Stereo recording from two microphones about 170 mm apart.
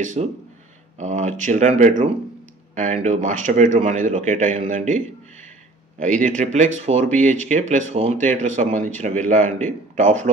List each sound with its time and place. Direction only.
0.0 s speech: 45° right (ahead or behind)